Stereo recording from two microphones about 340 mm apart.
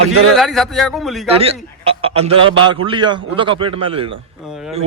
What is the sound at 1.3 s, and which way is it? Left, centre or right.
A man's voice, centre.